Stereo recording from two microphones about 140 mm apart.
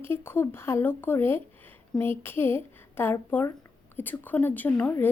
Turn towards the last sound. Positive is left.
turn(degrees=15)  # may be behind; listen again after turning